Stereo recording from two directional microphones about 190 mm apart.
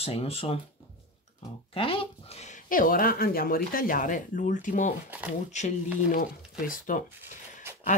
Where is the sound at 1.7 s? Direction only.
30° left (ahead or behind); by 7.0 s 45° left (ahead or behind).